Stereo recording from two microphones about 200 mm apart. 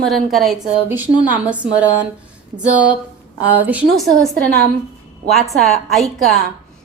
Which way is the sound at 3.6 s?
5° right (ahead or behind).